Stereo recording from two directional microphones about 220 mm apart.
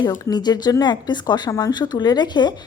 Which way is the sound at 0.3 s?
20° left (ahead or behind).